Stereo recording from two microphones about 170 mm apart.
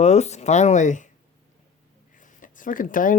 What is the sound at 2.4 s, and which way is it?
Speech, 50° left (ahead or behind).